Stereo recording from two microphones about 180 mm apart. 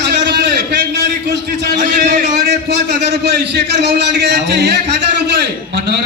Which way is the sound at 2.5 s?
70° right (ahead or behind).